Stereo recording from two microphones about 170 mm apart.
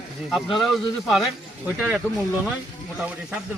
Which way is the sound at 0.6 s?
Centre (ahead or behind).